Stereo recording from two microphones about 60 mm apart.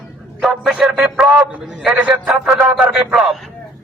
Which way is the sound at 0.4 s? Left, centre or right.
Centre.